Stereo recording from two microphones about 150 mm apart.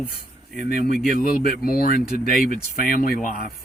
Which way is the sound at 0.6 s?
90° left.